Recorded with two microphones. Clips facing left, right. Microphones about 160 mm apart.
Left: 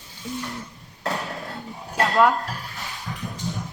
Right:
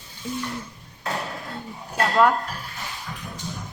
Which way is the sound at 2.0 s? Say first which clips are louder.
Even; centre (ahead or behind).